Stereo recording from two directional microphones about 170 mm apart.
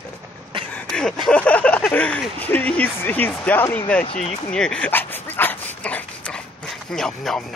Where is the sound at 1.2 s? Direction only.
5° left (ahead or behind).